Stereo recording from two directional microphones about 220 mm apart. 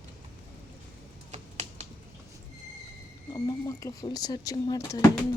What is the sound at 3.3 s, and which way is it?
Speech, 15° left (ahead or behind).